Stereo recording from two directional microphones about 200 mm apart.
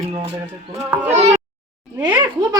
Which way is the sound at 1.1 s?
35° right (ahead or behind).